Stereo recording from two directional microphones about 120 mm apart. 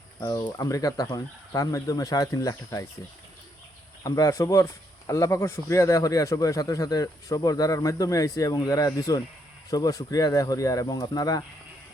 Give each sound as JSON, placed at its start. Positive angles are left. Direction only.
{"t": 0.2, "sound": "speech", "side_deg": 30}
{"t": 4.0, "sound": "speech", "side_deg": 30}